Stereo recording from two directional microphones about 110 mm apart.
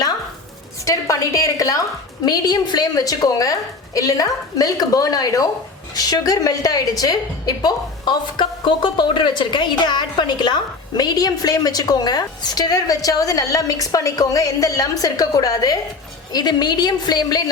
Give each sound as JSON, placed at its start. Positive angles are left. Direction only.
{"t": 0.9, "sound": "a woman's voice", "side_deg": 30}